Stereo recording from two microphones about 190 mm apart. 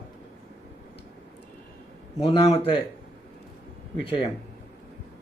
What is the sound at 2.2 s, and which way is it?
Speech, 30° left (ahead or behind).